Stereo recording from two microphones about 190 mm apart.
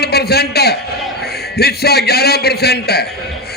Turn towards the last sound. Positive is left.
turn(degrees=55)  # may be behind; listen again after turning